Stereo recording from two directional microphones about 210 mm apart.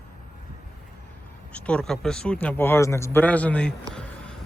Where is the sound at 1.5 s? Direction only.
5° left (ahead or behind).